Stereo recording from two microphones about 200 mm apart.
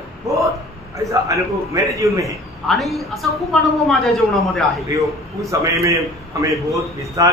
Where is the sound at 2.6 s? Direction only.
Centre (ahead or behind).